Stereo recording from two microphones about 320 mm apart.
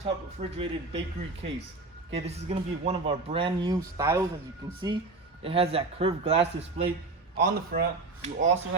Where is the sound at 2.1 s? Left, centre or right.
Centre.